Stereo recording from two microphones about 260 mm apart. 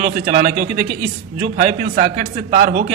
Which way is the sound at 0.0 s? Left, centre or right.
Right.